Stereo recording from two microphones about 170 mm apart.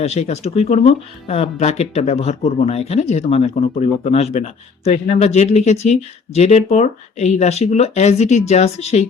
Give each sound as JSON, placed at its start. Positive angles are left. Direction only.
{"t": 0.0, "sound": "speech", "side_deg": 40}